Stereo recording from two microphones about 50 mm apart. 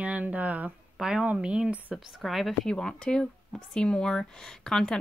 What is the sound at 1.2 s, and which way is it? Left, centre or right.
Speech, right.